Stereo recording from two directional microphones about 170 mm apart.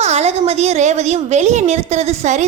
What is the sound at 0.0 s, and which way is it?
A woman's voice, 40° right (ahead or behind).